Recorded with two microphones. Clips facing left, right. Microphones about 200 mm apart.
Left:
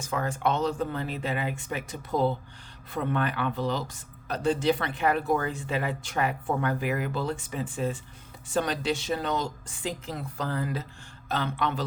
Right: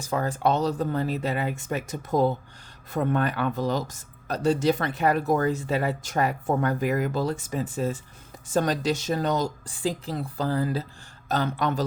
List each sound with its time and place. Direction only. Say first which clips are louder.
0.0 s speech: right 3 dB; 35° right (ahead or behind)